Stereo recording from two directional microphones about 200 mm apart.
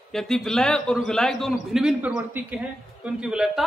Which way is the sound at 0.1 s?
Centre (ahead or behind).